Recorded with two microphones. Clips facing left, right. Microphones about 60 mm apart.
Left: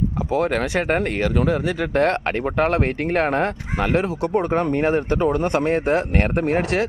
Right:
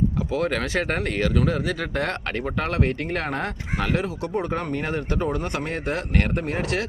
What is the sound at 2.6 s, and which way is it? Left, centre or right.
Speech, left.